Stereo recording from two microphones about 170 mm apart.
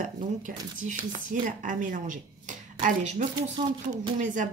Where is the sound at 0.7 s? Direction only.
50° right (ahead or behind).